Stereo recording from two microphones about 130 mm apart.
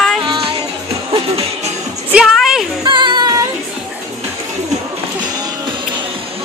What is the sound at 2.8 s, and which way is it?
Female singing, 35° right (ahead or behind).